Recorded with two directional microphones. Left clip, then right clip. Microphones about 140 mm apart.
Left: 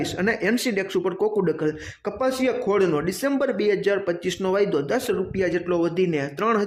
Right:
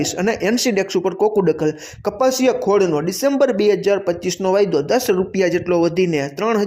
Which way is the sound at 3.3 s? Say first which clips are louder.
Right 7 dB; 30° right (ahead or behind).